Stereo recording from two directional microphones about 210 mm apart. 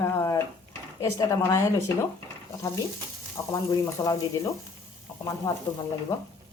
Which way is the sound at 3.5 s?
15° left (ahead or behind).